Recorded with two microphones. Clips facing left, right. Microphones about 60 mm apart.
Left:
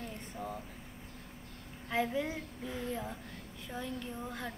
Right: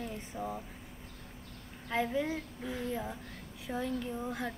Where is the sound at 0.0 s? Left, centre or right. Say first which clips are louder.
Right 3 dB; centre.